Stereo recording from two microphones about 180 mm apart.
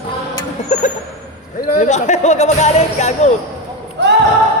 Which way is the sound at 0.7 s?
40° left (ahead or behind).